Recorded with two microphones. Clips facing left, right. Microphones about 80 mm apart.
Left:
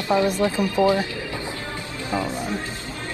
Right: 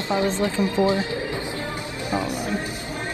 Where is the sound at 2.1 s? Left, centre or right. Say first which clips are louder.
Even; centre.